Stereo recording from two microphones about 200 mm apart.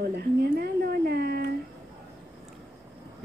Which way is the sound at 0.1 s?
55° right (ahead or behind).